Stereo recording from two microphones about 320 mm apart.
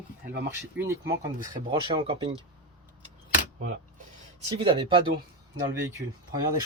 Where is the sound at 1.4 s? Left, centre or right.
Centre.